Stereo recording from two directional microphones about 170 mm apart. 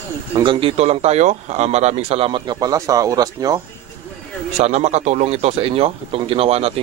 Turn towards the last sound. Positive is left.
turn(degrees=-35)  # may be behind; listen again after turning